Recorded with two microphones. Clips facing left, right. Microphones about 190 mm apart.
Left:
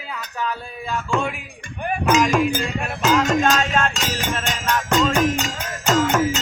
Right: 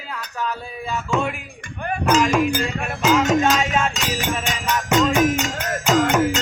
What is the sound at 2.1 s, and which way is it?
Speech, centre (ahead or behind).